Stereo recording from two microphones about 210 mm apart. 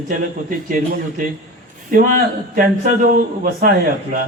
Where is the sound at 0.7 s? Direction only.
40° right (ahead or behind).